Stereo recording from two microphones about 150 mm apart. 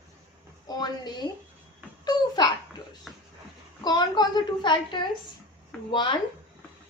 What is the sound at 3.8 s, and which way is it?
A woman's voice, 30° left (ahead or behind).